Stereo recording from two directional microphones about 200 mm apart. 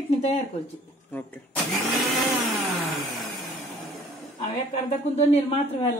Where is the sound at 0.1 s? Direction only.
35° left (ahead or behind).